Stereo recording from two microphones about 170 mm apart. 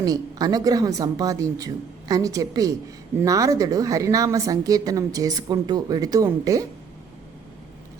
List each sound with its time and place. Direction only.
0.0 s a woman's voice: 20° right (ahead or behind)